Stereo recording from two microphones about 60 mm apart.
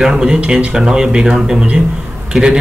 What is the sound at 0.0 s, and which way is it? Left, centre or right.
Speech, centre.